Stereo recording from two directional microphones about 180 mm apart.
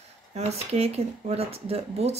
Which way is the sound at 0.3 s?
35° right (ahead or behind).